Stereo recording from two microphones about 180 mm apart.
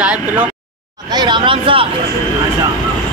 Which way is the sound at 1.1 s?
25° right (ahead or behind).